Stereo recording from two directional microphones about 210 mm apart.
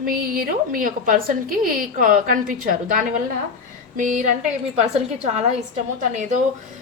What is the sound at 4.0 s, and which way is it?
Speech, 35° right (ahead or behind).